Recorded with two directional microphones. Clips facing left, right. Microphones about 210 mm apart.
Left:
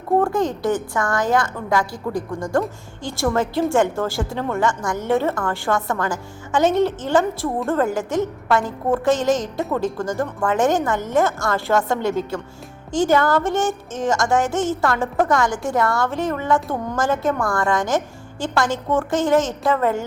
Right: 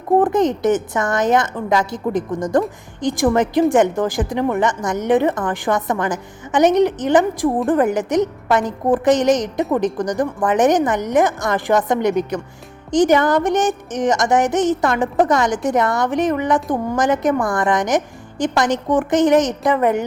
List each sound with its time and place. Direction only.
0.2 s a woman's voice: 20° right (ahead or behind)